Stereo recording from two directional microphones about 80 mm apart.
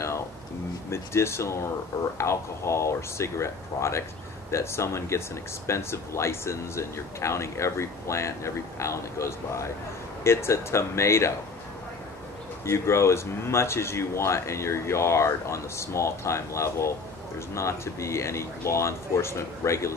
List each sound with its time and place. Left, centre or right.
0.9 s speech: left
12.6 s speech: left